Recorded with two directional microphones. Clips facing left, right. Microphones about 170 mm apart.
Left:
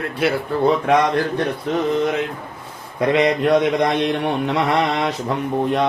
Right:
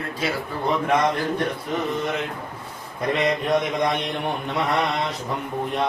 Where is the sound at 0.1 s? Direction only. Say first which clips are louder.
Left 8 dB; 65° left (ahead or behind).